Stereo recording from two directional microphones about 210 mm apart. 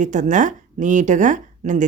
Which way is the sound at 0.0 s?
35° right (ahead or behind).